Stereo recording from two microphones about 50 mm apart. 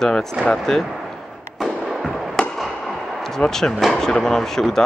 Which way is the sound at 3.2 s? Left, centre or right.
Centre.